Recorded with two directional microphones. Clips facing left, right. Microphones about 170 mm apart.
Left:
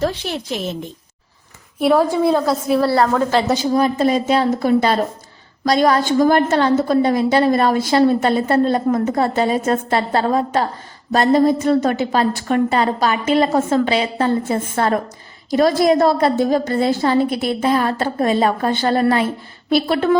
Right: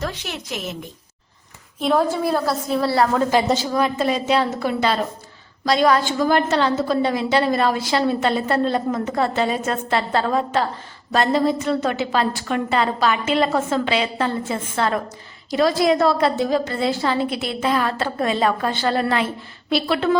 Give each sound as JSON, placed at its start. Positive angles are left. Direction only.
{"t": 0.0, "sound": "a woman's voice", "side_deg": 30}
{"t": 1.8, "sound": "a woman's voice", "side_deg": 5}
{"t": 3.2, "sound": "a woman's voice", "side_deg": -15}
{"t": 3.8, "sound": "a woman's voice", "side_deg": 40}